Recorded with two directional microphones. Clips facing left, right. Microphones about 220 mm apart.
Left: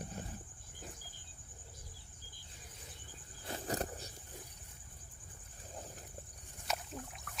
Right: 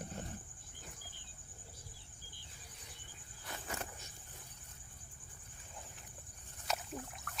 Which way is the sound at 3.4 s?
35° left (ahead or behind).